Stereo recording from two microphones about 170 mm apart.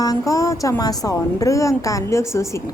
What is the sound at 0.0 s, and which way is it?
A woman's voice, 20° left (ahead or behind).